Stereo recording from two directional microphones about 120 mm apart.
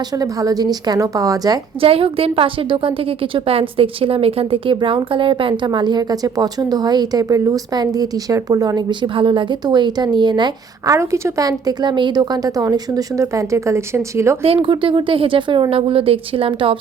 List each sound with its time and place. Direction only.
0.1 s a woman's voice: 30° right (ahead or behind)
1.8 s a woman's voice: 50° right (ahead or behind)
10.9 s a woman's voice: 25° right (ahead or behind)
14.4 s speech: 50° right (ahead or behind)